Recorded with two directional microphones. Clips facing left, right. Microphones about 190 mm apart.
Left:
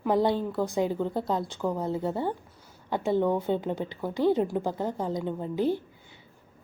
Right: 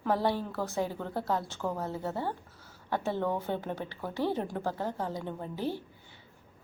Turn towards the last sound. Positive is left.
turn(degrees=15)  # may be behind; listen again after turning